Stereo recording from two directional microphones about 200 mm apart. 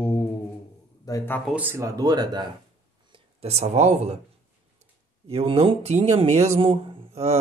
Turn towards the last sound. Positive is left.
turn(degrees=-30)  # may be behind; listen again after turning